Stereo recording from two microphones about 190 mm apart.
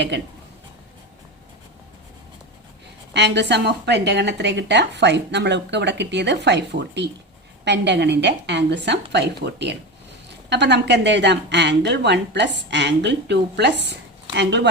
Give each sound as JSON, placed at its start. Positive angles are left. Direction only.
{"t": 0.1, "sound": "a woman's voice", "side_deg": -65}
{"t": 3.1, "sound": "a woman's voice", "side_deg": -65}